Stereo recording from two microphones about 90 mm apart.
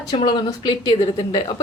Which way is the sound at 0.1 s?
75° left (ahead or behind).